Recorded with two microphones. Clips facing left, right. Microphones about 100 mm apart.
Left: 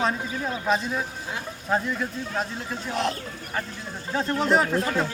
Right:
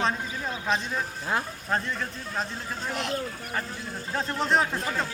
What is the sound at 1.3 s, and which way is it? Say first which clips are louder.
Speech: right 9 dB; 45° right (ahead or behind).